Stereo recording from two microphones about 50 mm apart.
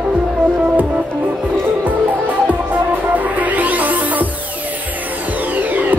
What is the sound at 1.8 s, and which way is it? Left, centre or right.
Music, right.